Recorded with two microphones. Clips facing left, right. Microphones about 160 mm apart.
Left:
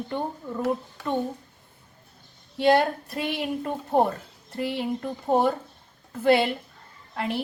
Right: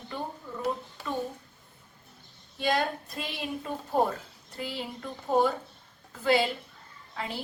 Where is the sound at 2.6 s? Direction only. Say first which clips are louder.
Left 8 dB; 65° left (ahead or behind).